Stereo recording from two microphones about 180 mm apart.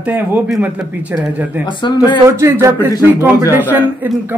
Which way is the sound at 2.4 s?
15° right (ahead or behind).